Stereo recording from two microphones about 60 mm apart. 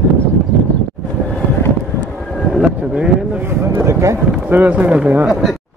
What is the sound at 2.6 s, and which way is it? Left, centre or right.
Vehicle, centre.